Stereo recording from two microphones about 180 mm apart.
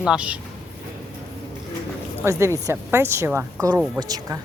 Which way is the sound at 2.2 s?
15° right (ahead or behind).